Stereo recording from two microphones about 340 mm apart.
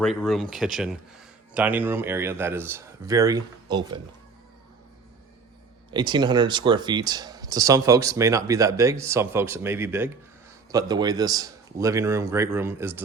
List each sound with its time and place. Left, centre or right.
0.0 s speech: centre
5.9 s speech: centre